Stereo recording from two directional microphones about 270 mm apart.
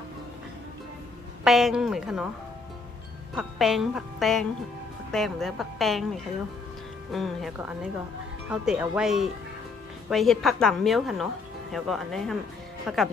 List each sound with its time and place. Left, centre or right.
1.4 s a woman's voice: centre
3.3 s a woman's voice: centre
7.1 s a woman's voice: centre